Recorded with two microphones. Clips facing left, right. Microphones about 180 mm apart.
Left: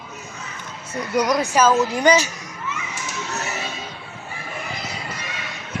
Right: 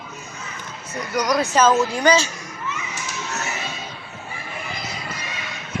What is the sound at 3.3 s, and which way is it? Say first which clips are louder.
Music: left 1 dB; 35° left (ahead or behind).